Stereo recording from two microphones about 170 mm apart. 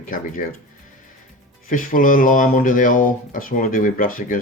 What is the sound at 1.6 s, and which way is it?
Speech, 50° left (ahead or behind).